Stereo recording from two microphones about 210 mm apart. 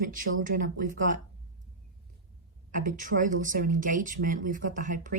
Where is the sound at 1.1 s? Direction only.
45° right (ahead or behind).